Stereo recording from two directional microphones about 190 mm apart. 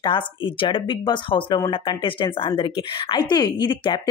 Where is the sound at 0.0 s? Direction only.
25° left (ahead or behind).